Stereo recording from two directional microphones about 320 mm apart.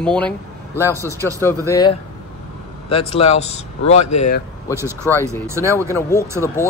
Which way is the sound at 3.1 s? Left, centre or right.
Centre.